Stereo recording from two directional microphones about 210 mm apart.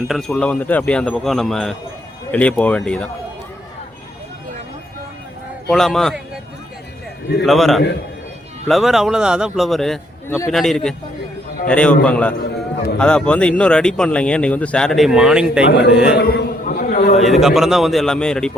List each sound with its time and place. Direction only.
0.1 s speech: centre (ahead or behind)
5.6 s speech: centre (ahead or behind)
7.4 s speech: centre (ahead or behind)
15.6 s a man's voice: 55° left (ahead or behind)
16.1 s a sound: 50° left (ahead or behind)
17.2 s speech: centre (ahead or behind)